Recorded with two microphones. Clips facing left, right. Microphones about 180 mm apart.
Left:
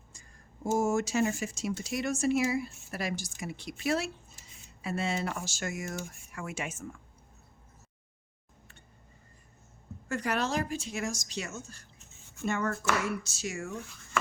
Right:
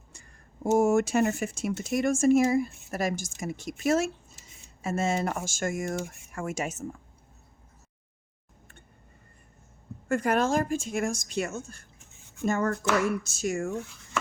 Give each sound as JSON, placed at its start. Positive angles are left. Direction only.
{"t": 0.1, "sound": "a sound", "side_deg": -65}
{"t": 1.8, "sound": "a woman's voice", "side_deg": -50}
{"t": 10.1, "sound": "a woman's voice", "side_deg": -50}
{"t": 12.5, "sound": "a woman's voice", "side_deg": -40}